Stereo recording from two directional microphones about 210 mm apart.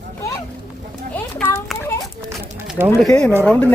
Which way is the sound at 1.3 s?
10° left (ahead or behind).